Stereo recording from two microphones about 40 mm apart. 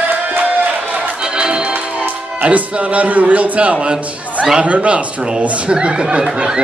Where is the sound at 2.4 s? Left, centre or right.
Right.